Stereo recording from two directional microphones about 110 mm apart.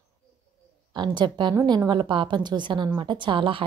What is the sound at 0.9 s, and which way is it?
A woman's voice, 45° right (ahead or behind).